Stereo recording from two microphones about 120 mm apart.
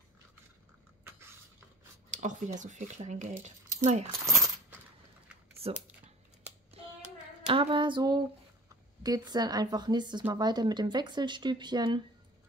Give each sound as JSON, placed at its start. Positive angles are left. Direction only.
{"t": 2.0, "sound": "speech", "side_deg": -90}
{"t": 5.6, "sound": "typing", "side_deg": -55}
{"t": 7.4, "sound": "hands", "side_deg": -45}
{"t": 9.0, "sound": "speech", "side_deg": -35}